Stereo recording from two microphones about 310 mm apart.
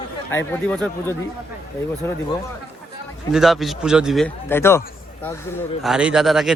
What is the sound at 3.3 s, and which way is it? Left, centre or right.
Speech, centre.